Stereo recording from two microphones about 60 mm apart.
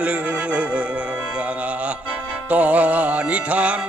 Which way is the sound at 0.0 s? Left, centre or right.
Right.